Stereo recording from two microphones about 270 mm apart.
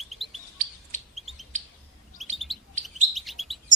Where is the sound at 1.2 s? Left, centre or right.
Centre.